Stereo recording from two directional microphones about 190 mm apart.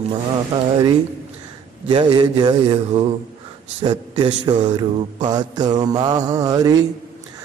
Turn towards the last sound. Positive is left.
turn(degrees=-20)  # may be behind; listen again after turning